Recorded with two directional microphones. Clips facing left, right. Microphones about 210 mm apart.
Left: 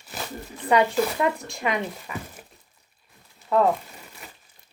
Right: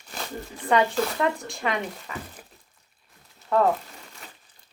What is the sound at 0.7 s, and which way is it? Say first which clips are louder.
Speech: left 2 dB; 10° left (ahead or behind).